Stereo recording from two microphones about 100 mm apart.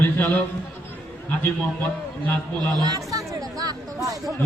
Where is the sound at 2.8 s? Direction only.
40° right (ahead or behind).